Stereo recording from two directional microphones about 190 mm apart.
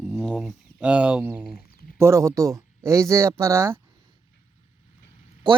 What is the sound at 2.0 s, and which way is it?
Speech, 15° right (ahead or behind).